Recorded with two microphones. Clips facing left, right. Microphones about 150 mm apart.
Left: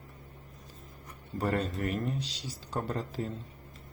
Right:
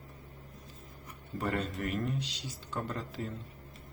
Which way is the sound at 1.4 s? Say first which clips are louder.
Left 3 dB; 35° left (ahead or behind).